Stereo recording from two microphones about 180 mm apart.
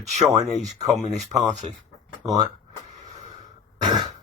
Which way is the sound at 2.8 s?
40° right (ahead or behind).